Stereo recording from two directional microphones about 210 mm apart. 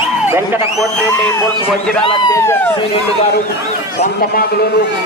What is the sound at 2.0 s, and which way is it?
Speech, 20° left (ahead or behind).